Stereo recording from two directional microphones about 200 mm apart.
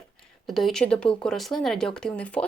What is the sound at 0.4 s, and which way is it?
Speech, centre (ahead or behind).